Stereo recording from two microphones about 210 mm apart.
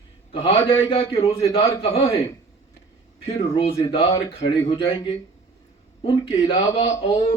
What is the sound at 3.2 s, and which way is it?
Speech, 25° left (ahead or behind).